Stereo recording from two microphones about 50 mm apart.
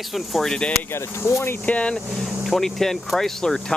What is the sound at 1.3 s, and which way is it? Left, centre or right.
Speech, left.